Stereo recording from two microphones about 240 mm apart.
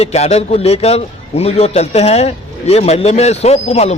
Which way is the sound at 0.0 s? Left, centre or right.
Left.